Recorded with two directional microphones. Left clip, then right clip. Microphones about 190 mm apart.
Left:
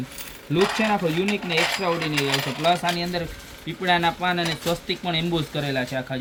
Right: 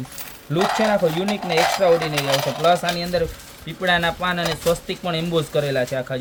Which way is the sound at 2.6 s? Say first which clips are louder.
Right 3 dB; 50° right (ahead or behind).